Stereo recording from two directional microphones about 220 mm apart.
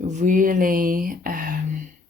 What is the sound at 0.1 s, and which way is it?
Speech, 35° right (ahead or behind).